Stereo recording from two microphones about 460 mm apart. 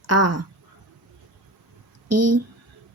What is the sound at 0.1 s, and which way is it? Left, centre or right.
Speech, right.